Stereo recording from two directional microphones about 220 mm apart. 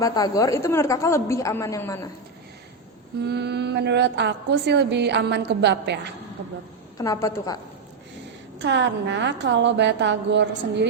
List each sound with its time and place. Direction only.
0.0 s a woman's voice: 15° left (ahead or behind)
3.2 s a woman's voice: 50° right (ahead or behind)
7.0 s a woman's voice: 15° left (ahead or behind)
8.5 s a woman's voice: 55° right (ahead or behind)